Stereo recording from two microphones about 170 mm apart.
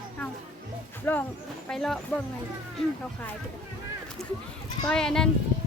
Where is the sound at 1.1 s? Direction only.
10° left (ahead or behind).